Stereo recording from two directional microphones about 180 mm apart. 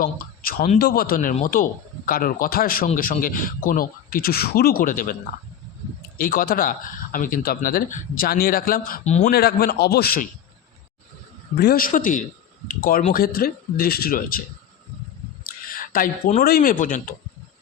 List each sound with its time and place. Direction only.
0.0 s a man's voice: 50° left (ahead or behind)
6.1 s a man's voice: 50° left (ahead or behind)
9.0 s a man's voice: 40° left (ahead or behind)
9.3 s speech: 60° left (ahead or behind)
11.5 s a man's voice: 60° left (ahead or behind)
15.7 s a sound: 50° left (ahead or behind)
16.4 s a man's voice: 55° left (ahead or behind)